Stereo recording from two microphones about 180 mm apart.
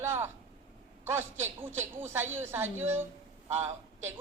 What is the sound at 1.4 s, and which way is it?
A man's voice, 15° right (ahead or behind).